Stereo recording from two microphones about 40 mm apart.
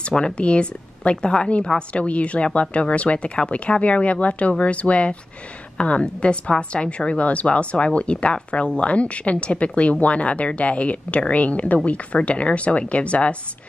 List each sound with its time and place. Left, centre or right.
0.1 s a woman's voice: left